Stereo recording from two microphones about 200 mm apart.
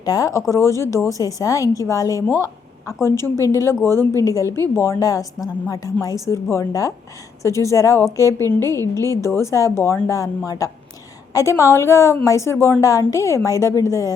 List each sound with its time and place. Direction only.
0.0 s a woman's voice: 20° left (ahead or behind)